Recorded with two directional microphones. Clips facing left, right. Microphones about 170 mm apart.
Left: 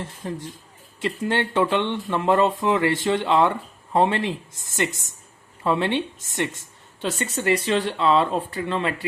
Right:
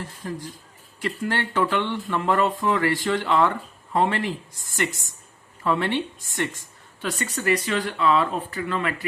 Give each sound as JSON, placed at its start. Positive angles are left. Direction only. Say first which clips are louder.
{"t": 0.0, "sound": "speech", "louder": "left 1 dB", "side_deg": 20}